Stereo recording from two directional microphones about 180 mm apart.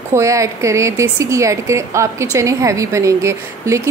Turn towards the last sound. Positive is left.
turn(degrees=-15)  # may be behind; listen again after turning